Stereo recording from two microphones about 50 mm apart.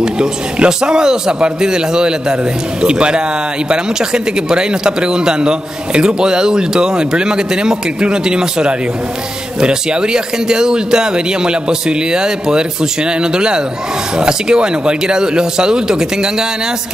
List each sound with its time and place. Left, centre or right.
0.0 s speech: centre